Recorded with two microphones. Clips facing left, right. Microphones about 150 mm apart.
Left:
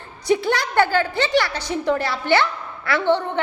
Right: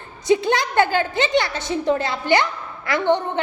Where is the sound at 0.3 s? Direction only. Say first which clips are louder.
Right 2 dB; 20° right (ahead or behind).